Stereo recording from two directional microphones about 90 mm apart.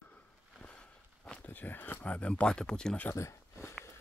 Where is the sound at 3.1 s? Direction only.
30° left (ahead or behind).